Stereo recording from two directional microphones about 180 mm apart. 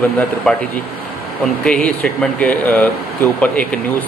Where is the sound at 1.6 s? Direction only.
5° left (ahead or behind).